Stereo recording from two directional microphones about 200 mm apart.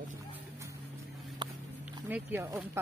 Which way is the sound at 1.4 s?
25° right (ahead or behind).